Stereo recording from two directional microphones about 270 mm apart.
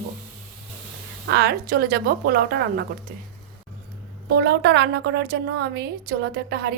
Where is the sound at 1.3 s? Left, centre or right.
Right.